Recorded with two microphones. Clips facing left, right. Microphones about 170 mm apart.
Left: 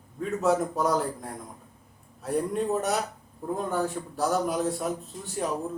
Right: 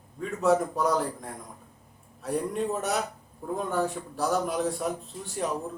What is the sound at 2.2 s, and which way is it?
Speech, centre (ahead or behind).